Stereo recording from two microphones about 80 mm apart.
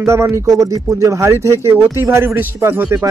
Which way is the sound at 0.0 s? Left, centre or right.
Right.